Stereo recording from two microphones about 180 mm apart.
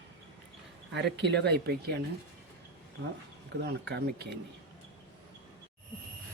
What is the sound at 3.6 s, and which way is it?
Speech, 70° right (ahead or behind).